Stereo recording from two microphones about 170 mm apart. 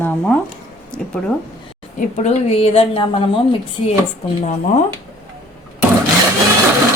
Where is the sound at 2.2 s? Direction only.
40° left (ahead or behind).